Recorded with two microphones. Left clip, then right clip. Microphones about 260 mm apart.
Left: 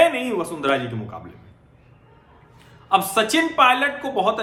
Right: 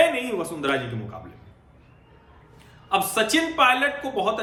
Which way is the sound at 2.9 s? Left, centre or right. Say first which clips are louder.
Left 3 dB; centre.